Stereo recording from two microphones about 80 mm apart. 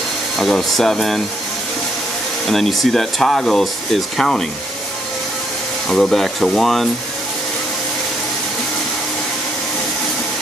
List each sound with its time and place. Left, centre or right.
0.4 s speech: centre
2.4 s speech: centre
5.9 s speech: centre